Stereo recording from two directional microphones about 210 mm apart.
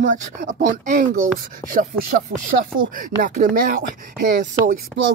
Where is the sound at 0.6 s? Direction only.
35° right (ahead or behind).